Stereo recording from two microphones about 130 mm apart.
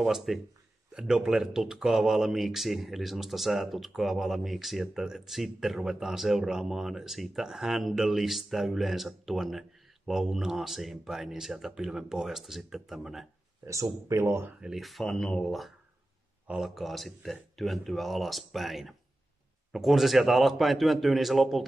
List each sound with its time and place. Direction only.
0.0 s speech: centre (ahead or behind)
13.7 s speech: 25° right (ahead or behind)
14.6 s speech: centre (ahead or behind)